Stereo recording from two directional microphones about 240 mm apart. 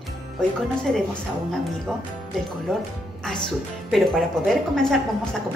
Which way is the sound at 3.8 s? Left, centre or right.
Centre.